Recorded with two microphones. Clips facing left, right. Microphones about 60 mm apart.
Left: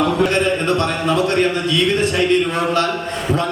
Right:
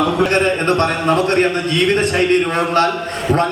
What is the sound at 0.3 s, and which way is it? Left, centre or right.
A man's voice, right.